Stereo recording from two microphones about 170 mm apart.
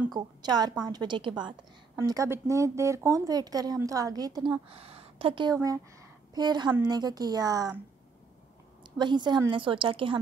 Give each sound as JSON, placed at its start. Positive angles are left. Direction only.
{"t": 0.1, "sound": "a woman's voice", "side_deg": -25}
{"t": 8.8, "sound": "a woman's voice", "side_deg": -25}